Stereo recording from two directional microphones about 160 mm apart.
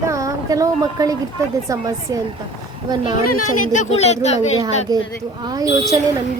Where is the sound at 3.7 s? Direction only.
40° left (ahead or behind).